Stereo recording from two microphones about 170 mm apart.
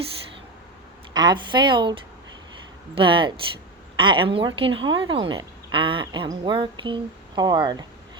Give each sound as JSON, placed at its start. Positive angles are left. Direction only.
{"t": 1.1, "sound": "speech", "side_deg": -25}